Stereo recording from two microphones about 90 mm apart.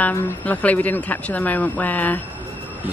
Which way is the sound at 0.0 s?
20° left (ahead or behind).